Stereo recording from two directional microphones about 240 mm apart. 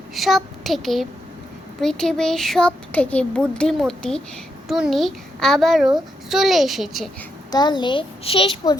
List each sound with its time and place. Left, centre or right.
0.1 s speech: centre
7.5 s a child's voice: centre